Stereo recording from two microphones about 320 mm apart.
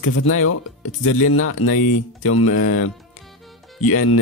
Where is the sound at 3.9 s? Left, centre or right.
Left.